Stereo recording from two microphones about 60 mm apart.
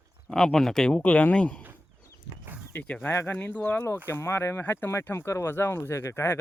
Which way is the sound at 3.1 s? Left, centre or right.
Left.